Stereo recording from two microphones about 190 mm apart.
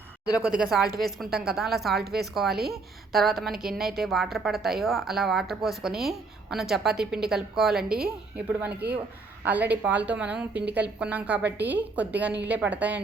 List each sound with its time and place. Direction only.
0.3 s a woman's voice: 5° right (ahead or behind)
2.0 s a woman's voice: 55° right (ahead or behind)
2.3 s a woman's voice: centre (ahead or behind)